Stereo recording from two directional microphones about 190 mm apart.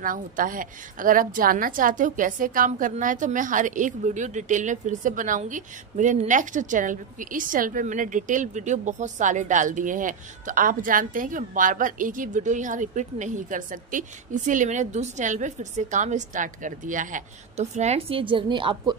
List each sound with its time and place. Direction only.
0.0 s a woman's voice: 45° right (ahead or behind); by 18.9 s 25° right (ahead or behind)